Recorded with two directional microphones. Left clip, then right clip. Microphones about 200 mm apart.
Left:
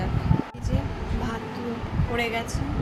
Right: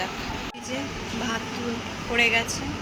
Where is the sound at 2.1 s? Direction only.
5° left (ahead or behind).